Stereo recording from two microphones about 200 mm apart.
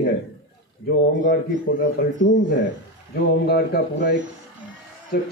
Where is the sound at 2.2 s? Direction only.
65° left (ahead or behind).